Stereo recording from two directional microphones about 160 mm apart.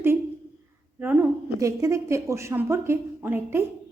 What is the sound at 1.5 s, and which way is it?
Speech, 20° right (ahead or behind).